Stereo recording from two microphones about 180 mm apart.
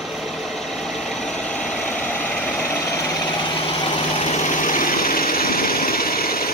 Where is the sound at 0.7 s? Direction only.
Centre (ahead or behind).